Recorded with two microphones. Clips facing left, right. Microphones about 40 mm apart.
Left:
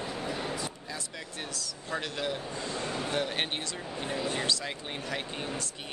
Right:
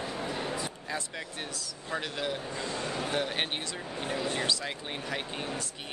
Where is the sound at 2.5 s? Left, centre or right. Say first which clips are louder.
Right 1 dB; right.